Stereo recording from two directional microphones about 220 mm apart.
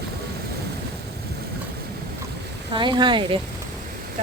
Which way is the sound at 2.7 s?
20° right (ahead or behind).